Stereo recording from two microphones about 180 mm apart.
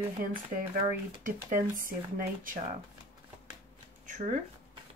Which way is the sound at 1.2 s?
50° right (ahead or behind).